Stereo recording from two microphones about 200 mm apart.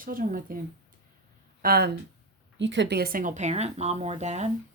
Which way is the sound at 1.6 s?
50° right (ahead or behind).